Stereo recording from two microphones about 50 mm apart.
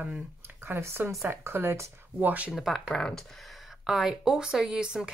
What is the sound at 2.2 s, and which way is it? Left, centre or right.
Speech, right.